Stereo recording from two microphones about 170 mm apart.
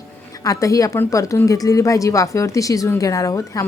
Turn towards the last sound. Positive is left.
turn(degrees=20)  # may be behind; listen again after turning